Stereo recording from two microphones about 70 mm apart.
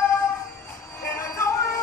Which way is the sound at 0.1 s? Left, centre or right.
Left.